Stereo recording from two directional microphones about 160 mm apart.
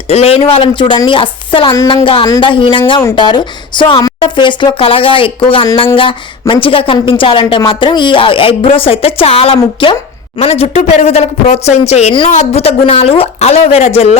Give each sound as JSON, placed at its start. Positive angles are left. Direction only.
{"t": 0.1, "sound": "a woman's voice", "side_deg": 40}